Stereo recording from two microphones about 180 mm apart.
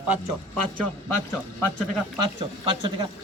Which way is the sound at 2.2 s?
25° right (ahead or behind).